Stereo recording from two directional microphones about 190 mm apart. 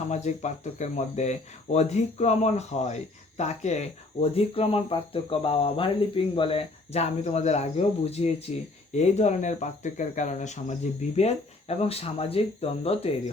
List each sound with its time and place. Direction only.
0.1 s speech: 35° left (ahead or behind)